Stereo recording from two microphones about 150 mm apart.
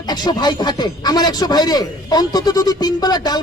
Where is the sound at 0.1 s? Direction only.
30° left (ahead or behind).